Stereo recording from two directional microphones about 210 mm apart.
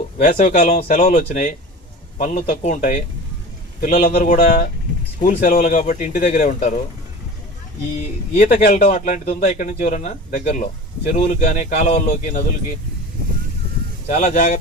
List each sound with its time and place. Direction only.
0.2 s speech: 35° left (ahead or behind)
7.9 s speech: 35° left (ahead or behind)
14.1 s speech: 35° left (ahead or behind)